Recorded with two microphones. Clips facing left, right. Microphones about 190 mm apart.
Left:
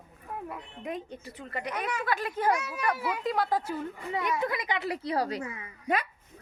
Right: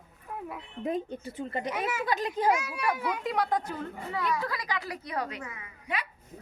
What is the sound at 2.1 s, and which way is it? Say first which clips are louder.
Speech: right 1 dB; 20° right (ahead or behind).